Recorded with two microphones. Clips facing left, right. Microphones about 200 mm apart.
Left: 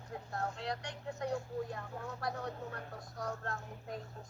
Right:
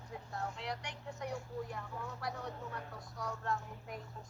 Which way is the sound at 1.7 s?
55° left (ahead or behind).